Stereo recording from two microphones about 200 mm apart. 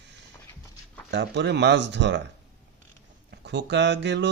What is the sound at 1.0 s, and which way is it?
Speech, 60° right (ahead or behind).